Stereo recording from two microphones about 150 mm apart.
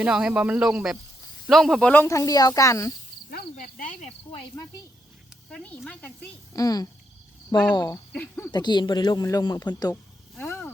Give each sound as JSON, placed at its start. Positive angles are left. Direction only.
{"t": 0.0, "sound": "speech", "side_deg": -5}
{"t": 3.2, "sound": "speech", "side_deg": 70}
{"t": 5.5, "sound": "speech", "side_deg": 5}
{"t": 6.5, "sound": "speech", "side_deg": 25}
{"t": 8.1, "sound": "speech", "side_deg": 10}
{"t": 8.5, "sound": "speech", "side_deg": 30}
{"t": 10.3, "sound": "a sound", "side_deg": 10}